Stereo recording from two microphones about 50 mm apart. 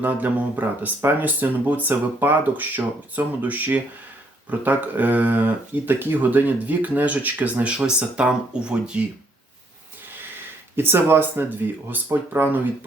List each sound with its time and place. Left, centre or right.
0.0 s speech: right
10.8 s speech: right